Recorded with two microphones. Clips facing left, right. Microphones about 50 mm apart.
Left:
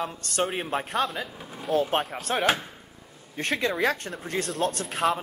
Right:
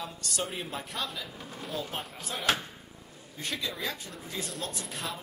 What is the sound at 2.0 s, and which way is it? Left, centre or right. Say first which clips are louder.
Speech: left 11 dB; left.